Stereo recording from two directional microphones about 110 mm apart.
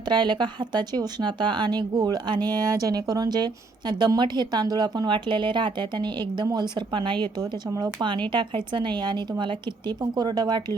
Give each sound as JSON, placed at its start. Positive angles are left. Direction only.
{"t": 0.1, "sound": "a woman's voice", "side_deg": -45}